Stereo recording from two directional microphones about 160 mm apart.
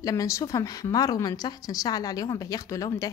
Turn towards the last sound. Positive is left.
turn(degrees=20)  # may be behind; listen again after turning